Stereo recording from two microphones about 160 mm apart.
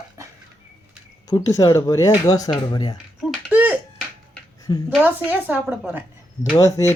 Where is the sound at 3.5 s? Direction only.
10° right (ahead or behind).